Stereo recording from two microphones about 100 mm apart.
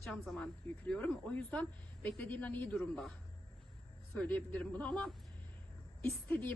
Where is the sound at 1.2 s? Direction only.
15° left (ahead or behind).